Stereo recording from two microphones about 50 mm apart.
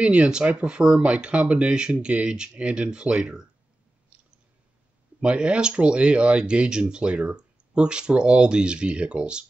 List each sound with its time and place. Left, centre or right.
0.0 s speech: right
5.2 s speech: right